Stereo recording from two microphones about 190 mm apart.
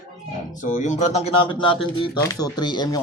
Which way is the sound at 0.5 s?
40° left (ahead or behind).